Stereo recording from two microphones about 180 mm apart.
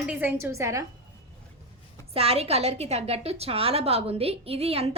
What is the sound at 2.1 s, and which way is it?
A woman's voice, 35° right (ahead or behind).